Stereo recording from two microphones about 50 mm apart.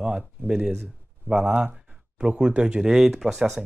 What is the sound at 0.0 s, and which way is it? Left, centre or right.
Speech, centre.